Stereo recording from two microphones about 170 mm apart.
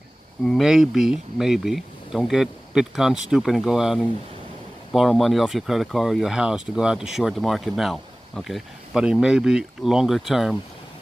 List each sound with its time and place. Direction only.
0.5 s speech: centre (ahead or behind)